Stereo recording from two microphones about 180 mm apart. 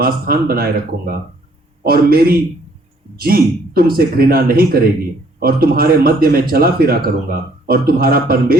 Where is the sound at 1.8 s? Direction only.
55° right (ahead or behind).